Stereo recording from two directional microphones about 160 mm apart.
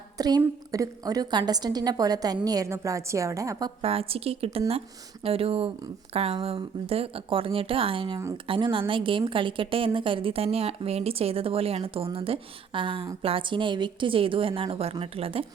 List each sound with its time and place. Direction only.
0.2 s a woman's voice: 25° right (ahead or behind)
3.8 s a woman's voice: 35° right (ahead or behind)